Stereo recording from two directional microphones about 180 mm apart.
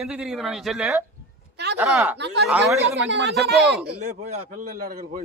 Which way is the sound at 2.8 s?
80° right.